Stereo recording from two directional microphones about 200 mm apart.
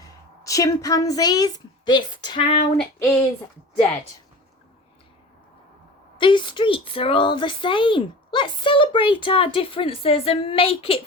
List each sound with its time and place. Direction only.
0.4 s speech: 15° left (ahead or behind)
2.7 s female singing: 5° left (ahead or behind)
6.1 s speech: 25° left (ahead or behind)